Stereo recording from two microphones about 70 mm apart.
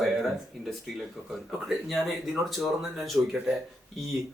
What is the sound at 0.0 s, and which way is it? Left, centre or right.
Speech, centre.